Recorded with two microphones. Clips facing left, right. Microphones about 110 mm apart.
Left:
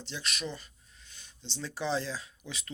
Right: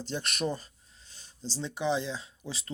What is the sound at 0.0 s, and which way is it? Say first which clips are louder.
Speech: right 6 dB; 50° right (ahead or behind).